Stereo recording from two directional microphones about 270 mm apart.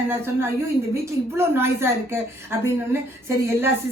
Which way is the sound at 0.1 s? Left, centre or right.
Centre.